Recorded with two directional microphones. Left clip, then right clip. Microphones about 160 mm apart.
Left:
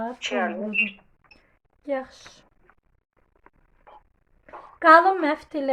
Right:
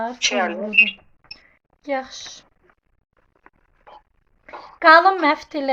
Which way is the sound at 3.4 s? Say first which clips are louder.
Right 4 dB; 35° right (ahead or behind).